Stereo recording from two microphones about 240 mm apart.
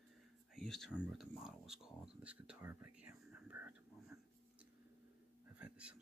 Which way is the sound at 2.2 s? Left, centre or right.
Centre.